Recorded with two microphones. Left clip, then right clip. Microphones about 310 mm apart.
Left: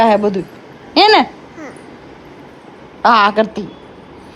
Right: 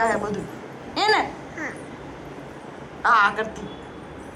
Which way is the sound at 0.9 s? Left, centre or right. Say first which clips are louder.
Left 11 dB; left.